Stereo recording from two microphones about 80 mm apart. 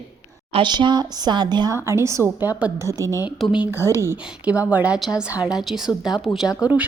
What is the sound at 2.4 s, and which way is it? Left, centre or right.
Speech, right.